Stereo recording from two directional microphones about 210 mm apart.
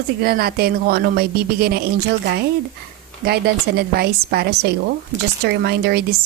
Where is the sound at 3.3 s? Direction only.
50° right (ahead or behind).